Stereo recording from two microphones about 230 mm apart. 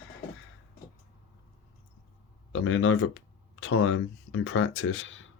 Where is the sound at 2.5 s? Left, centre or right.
Left.